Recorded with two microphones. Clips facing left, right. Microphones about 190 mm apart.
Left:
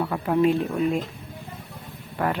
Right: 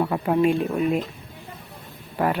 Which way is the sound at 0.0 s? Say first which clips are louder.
Right 1 dB; 20° right (ahead or behind).